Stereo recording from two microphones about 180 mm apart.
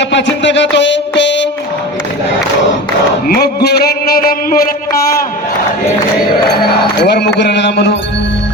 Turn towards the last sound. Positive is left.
turn(degrees=70)  # may be behind; listen again after turning